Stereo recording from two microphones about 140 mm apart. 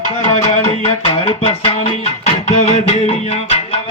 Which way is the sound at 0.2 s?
55° left (ahead or behind).